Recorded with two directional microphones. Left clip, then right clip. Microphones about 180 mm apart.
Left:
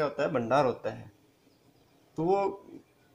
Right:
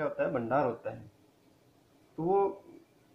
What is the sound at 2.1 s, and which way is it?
Speech, 50° left (ahead or behind).